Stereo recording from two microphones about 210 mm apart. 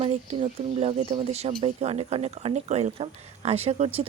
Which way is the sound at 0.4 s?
30° right (ahead or behind).